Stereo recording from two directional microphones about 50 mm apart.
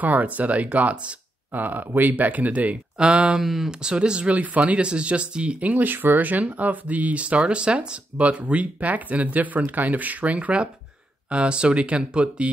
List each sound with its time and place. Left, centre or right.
0.0 s speech: right
3.0 s speech: centre
3.3 s speech: centre
3.8 s speech: centre